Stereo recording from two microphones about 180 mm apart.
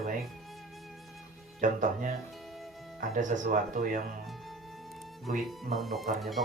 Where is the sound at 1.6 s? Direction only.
45° right (ahead or behind).